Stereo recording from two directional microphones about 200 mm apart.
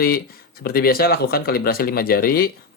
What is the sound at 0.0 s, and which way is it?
Speech, 50° left (ahead or behind).